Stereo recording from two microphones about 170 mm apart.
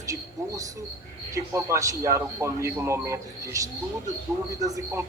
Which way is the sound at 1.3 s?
15° right (ahead or behind).